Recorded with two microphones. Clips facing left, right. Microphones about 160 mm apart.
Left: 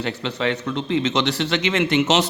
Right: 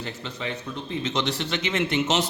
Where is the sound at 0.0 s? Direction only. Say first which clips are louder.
Left 9 dB; 75° left (ahead or behind).